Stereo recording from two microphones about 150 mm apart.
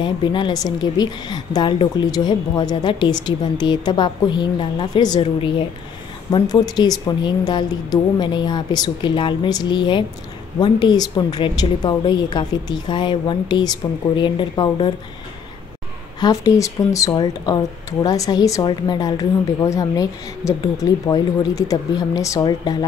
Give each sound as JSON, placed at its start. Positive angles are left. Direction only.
{"t": 0.0, "sound": "a woman's voice", "side_deg": 30}
{"t": 16.2, "sound": "a woman's voice", "side_deg": 25}